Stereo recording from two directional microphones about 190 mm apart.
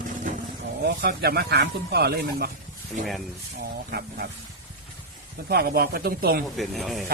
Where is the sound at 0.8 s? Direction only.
55° right (ahead or behind).